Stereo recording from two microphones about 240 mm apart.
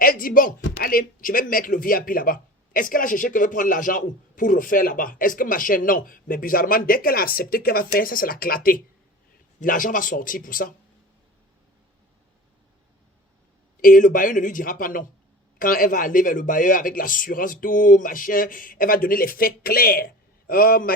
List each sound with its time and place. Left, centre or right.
0.0 s speech: left
13.8 s speech: left